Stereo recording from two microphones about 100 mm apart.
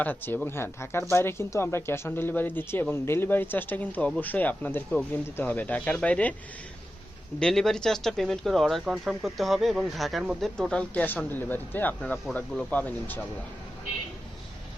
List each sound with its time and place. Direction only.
0.0 s speech: 20° left (ahead or behind)
7.3 s speech: 5° left (ahead or behind)